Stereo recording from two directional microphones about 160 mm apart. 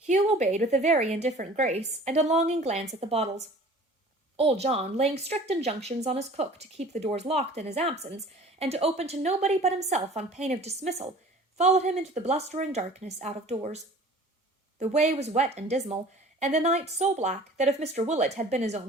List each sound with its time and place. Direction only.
0.0 s a woman's voice: 45° right (ahead or behind)